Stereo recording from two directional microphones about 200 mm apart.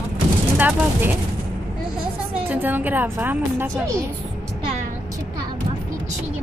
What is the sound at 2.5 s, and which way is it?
A woman's voice, 10° right (ahead or behind).